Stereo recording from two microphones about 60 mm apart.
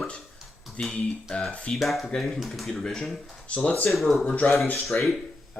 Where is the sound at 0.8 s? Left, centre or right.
Centre.